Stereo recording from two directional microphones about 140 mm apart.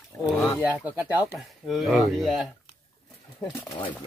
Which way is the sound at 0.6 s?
10° right (ahead or behind).